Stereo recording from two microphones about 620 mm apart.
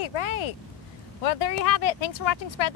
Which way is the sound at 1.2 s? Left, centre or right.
Left.